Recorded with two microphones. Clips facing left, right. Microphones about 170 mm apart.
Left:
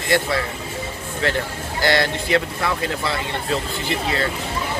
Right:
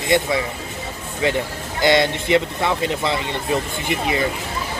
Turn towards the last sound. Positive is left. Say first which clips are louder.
# right 2 dB
turn(degrees=-15)  # may be behind; listen again after turning